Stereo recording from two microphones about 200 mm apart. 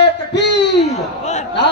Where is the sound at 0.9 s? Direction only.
35° left (ahead or behind).